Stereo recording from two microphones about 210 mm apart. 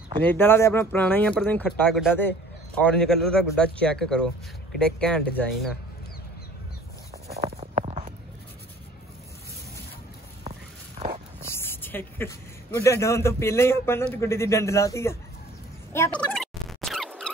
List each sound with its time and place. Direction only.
0.2 s a man's voice: 10° left (ahead or behind)
7.3 s writing: 30° right (ahead or behind)
11.5 s speech: 10° left (ahead or behind)
15.9 s a sound: 10° left (ahead or behind)